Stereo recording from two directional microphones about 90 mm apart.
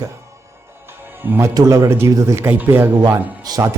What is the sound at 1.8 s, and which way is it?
Speech, 30° right (ahead or behind).